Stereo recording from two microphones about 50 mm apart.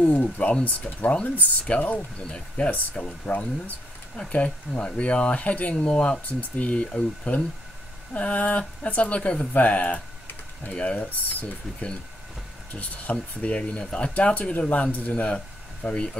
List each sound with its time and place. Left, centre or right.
0.0 s speech: left
8.1 s speech: left
10.7 s speech: centre